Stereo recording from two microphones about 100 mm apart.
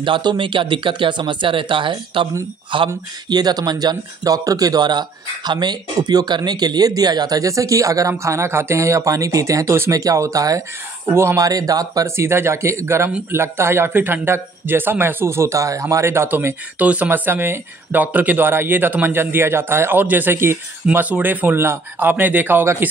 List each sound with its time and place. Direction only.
0.0 s speech: 50° right (ahead or behind)
3.3 s speech: 45° right (ahead or behind)
11.1 s speech: 25° right (ahead or behind)